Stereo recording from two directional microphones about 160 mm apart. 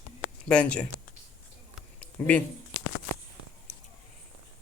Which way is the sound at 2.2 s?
10° left (ahead or behind).